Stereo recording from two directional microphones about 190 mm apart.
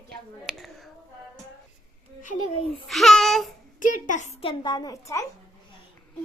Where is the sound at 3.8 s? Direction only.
45° left (ahead or behind); by 5.2 s 15° left (ahead or behind).